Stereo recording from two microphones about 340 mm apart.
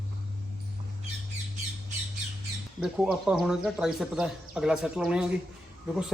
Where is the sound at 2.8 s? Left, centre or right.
Centre.